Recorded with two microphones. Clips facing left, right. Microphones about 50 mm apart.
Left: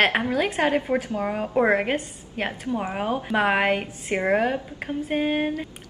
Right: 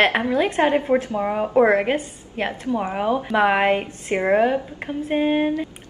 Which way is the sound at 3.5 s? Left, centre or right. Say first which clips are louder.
Right 3 dB; centre.